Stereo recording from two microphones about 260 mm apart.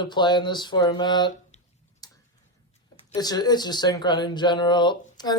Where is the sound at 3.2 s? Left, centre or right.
Centre.